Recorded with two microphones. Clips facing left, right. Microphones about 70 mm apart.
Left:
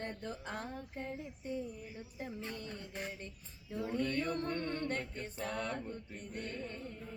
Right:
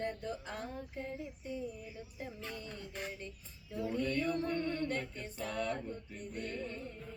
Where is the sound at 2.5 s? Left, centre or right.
Left.